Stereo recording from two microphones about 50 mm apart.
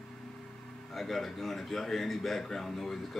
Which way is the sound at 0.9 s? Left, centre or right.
Centre.